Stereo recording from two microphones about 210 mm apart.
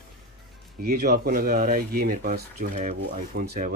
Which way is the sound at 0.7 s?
50° right (ahead or behind).